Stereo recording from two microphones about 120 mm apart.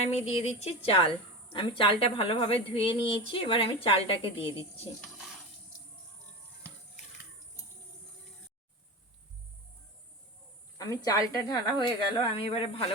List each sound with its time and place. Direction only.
0.0 s a woman's voice: 60° left (ahead or behind)
10.8 s a woman's voice: 30° left (ahead or behind); by 12.8 s 50° left (ahead or behind)